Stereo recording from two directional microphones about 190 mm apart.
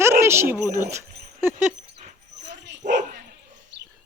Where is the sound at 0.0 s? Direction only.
15° right (ahead or behind).